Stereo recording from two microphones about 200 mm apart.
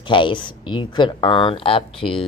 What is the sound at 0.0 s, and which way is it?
Speech, 25° left (ahead or behind).